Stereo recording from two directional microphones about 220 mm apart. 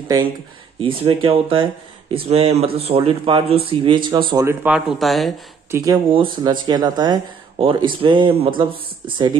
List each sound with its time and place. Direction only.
0.7 s speech: 25° right (ahead or behind)
4.6 s speech: 5° right (ahead or behind)
5.7 s speech: 15° right (ahead or behind)